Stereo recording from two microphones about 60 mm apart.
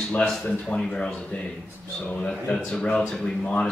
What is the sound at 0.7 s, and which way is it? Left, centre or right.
Speech, centre.